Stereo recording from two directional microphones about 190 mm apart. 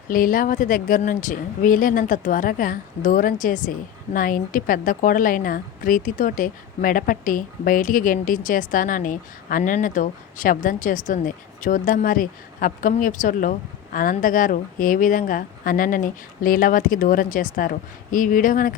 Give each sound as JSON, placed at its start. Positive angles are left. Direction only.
{"t": 0.1, "sound": "a woman's voice", "side_deg": 45}